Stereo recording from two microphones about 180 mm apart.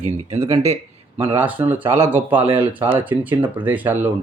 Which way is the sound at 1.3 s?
10° right (ahead or behind).